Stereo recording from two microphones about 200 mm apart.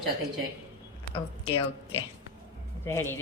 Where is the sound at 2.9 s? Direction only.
15° left (ahead or behind).